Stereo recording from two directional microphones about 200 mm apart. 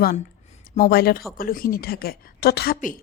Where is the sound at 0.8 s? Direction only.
50° left (ahead or behind).